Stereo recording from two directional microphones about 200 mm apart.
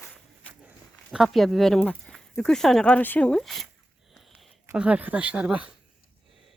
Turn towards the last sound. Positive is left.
turn(degrees=-5)  # may be behind; listen again after turning